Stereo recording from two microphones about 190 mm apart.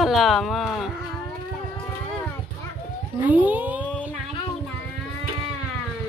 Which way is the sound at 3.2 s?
10° right (ahead or behind).